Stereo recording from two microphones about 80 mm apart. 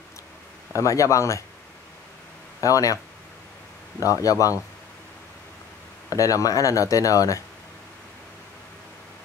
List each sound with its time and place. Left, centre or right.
0.7 s speech: left
2.6 s speech: left
4.0 s speech: left
6.0 s speech: left